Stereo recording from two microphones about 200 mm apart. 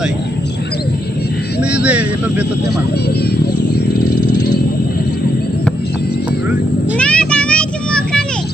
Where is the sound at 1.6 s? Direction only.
5° right (ahead or behind).